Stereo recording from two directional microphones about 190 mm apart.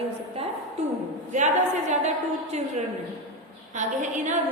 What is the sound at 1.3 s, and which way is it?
Speech, 40° right (ahead or behind).